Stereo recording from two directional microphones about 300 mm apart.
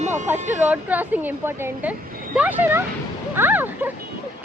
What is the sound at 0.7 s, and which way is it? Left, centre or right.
A woman's voice, centre.